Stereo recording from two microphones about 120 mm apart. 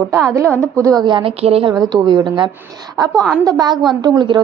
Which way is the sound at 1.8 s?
35° right (ahead or behind).